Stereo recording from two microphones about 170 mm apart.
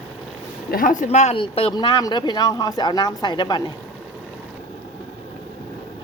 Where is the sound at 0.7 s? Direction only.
50° left (ahead or behind); by 3.6 s 25° left (ahead or behind).